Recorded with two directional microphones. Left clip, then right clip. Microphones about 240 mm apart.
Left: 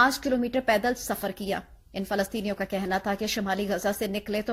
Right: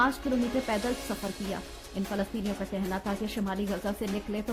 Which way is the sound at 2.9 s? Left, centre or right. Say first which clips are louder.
Left 6 dB; centre.